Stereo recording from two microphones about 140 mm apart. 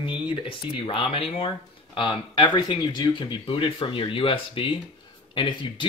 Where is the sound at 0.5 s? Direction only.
40° left (ahead or behind).